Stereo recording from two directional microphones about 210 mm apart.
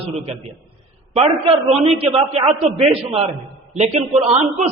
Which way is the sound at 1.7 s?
30° right (ahead or behind).